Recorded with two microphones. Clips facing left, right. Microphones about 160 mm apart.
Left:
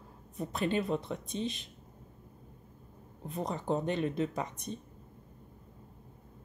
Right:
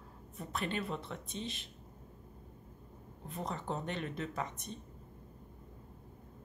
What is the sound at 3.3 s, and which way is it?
Speech, 15° left (ahead or behind).